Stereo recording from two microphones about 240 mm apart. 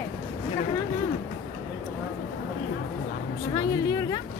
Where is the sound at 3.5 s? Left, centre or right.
Centre.